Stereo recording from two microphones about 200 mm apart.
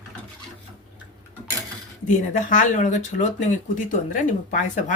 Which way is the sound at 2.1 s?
40° left (ahead or behind).